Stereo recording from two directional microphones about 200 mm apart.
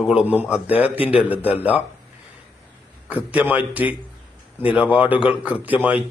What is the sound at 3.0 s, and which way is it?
A man's voice, 5° right (ahead or behind).